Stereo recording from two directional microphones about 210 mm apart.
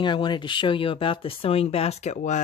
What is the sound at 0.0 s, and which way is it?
Speech, 20° left (ahead or behind).